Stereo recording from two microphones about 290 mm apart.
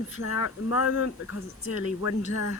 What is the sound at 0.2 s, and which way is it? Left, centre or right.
Speech, left.